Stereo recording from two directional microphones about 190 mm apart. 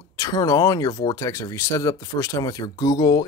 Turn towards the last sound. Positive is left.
turn(degrees=20)  # may be behind; listen again after turning